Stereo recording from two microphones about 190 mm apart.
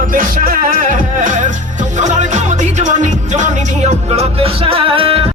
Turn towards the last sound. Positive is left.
turn(degrees=-30)  # may be behind; listen again after turning